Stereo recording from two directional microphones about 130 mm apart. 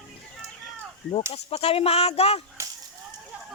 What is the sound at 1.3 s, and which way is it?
Speech, 50° left (ahead or behind).